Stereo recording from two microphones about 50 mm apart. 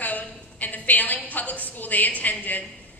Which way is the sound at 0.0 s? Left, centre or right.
Left.